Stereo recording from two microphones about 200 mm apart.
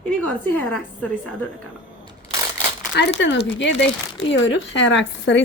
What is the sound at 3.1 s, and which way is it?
A woman's voice, 65° left (ahead or behind).